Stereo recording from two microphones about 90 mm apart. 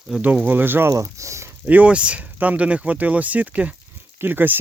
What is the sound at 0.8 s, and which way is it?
Speech, 35° right (ahead or behind).